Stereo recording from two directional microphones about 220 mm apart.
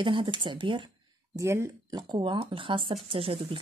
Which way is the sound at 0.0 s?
20° right (ahead or behind).